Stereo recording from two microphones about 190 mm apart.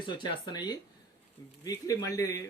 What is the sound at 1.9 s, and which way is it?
Speech, 15° left (ahead or behind).